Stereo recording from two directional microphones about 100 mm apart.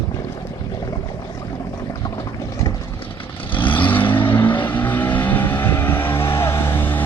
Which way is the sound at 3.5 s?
55° left (ahead or behind).